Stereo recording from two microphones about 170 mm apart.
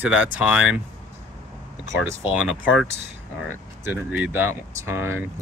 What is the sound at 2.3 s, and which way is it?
Speech, 5° right (ahead or behind).